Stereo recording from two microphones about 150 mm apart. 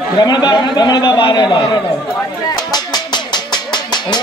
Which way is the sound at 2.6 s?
25° left (ahead or behind).